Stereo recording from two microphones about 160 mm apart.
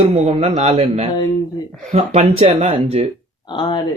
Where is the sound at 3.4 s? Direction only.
30° left (ahead or behind).